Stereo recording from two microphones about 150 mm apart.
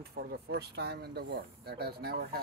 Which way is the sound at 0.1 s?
90° right.